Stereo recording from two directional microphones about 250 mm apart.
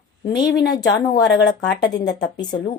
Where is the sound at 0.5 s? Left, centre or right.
Left.